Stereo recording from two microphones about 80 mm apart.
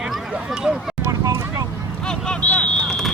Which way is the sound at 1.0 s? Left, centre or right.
Right.